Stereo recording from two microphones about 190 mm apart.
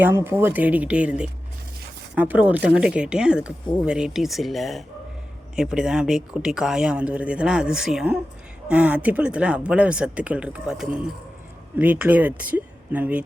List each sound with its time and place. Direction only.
0.0 s speech: 15° right (ahead or behind)